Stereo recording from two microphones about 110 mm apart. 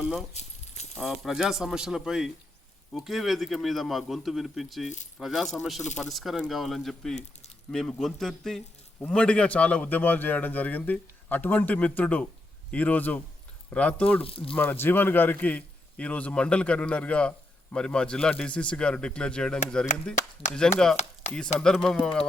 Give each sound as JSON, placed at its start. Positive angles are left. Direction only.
{"t": 0.0, "sound": "keys jangling", "side_deg": -5}
{"t": 0.9, "sound": "a man's voice", "side_deg": 0}
{"t": 14.2, "sound": "speech", "side_deg": 60}
{"t": 14.5, "sound": "a man's voice", "side_deg": 15}
{"t": 20.8, "sound": "speech", "side_deg": 5}
{"t": 21.2, "sound": "speech", "side_deg": 90}
{"t": 21.6, "sound": "speech", "side_deg": 5}